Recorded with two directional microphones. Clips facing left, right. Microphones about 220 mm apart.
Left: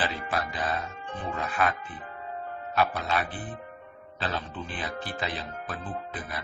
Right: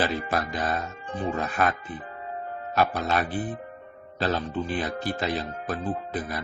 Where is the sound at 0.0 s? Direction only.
45° right (ahead or behind).